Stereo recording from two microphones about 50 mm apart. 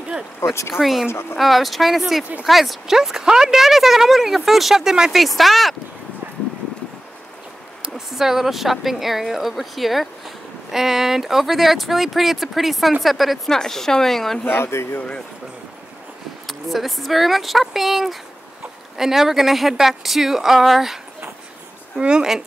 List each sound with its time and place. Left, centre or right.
0.4 s speech: left
0.7 s speech: centre
5.1 s speech: centre
7.9 s a woman's voice: centre
14.5 s speech: left
16.4 s speech: centre